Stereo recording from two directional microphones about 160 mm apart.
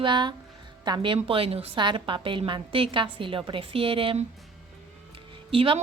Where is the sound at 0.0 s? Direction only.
30° right (ahead or behind).